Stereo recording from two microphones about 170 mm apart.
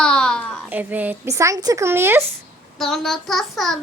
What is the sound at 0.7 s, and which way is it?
Speech, 10° right (ahead or behind).